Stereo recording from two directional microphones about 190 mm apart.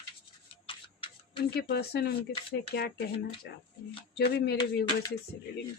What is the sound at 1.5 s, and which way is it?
Speech, 55° left (ahead or behind).